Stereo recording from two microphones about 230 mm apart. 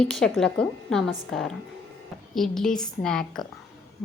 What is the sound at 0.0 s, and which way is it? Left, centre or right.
A woman's voice, centre.